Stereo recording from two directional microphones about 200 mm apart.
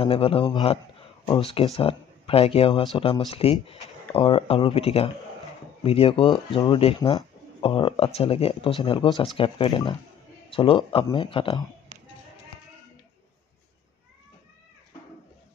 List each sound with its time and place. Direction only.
0.0 s a man's voice: 30° left (ahead or behind)